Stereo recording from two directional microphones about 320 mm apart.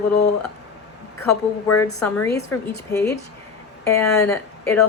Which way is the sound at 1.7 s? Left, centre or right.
Left.